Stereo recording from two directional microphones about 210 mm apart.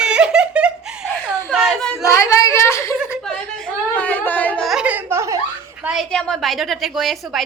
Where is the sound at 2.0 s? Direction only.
15° left (ahead or behind).